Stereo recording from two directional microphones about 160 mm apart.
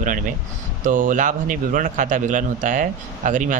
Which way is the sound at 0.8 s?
55° right (ahead or behind).